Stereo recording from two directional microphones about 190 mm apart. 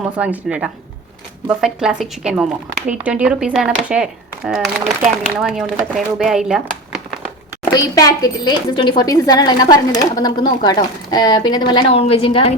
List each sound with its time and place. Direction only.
0.2 s speech: 5° right (ahead or behind)
7.6 s speech: 20° left (ahead or behind)